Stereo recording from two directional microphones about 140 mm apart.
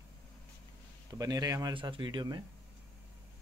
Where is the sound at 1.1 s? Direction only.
25° right (ahead or behind).